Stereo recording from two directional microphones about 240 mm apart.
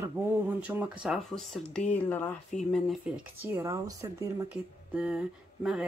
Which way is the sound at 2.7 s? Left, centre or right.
Centre.